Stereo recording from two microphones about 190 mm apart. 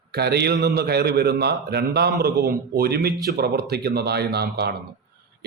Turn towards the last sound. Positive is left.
turn(degrees=-60)  # may be behind; listen again after turning